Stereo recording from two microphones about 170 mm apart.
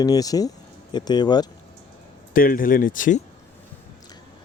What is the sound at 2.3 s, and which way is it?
Speech, 55° left (ahead or behind).